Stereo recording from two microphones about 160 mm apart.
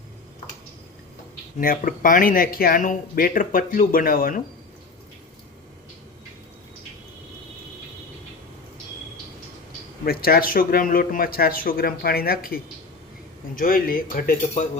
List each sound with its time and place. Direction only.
1.6 s speech: 60° left (ahead or behind)
10.0 s speech: 70° left (ahead or behind)
13.6 s speech: 60° left (ahead or behind)